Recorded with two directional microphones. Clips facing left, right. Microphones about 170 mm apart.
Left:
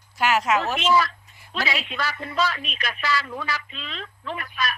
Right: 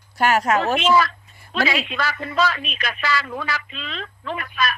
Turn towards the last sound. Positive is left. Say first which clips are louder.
# right 4 dB
turn(degrees=-90)